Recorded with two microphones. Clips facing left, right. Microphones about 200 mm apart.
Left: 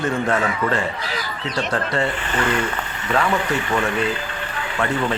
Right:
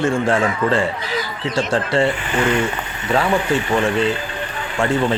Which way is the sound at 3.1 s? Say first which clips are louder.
Right 3 dB; 30° right (ahead or behind).